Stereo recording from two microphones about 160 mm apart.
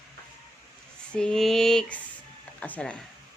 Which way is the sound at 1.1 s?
5° left (ahead or behind).